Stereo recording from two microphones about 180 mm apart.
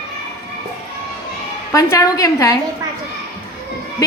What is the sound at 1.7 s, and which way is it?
Speech, 20° left (ahead or behind).